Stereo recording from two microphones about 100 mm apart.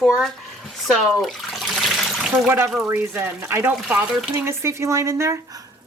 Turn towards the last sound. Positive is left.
turn(degrees=-30)  # may be behind; listen again after turning